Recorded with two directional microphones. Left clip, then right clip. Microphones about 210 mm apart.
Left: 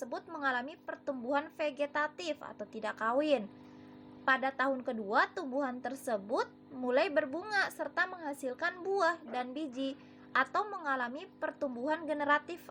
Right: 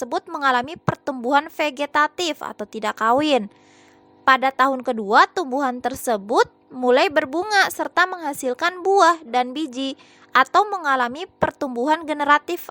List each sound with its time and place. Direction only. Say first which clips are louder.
0.0 s a woman's voice: right 14 dB; 50° right (ahead or behind)